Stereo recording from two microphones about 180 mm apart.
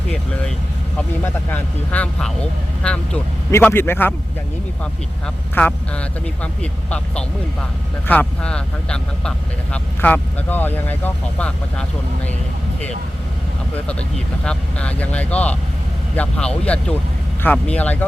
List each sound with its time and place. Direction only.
0.9 s speech: 10° left (ahead or behind)
5.5 s speech: 10° left (ahead or behind)
14.4 s speech: 5° left (ahead or behind)